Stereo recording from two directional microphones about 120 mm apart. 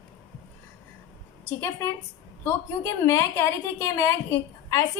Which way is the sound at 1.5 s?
20° left (ahead or behind).